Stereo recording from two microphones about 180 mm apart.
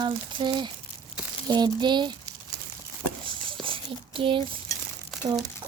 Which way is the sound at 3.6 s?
30° right (ahead or behind).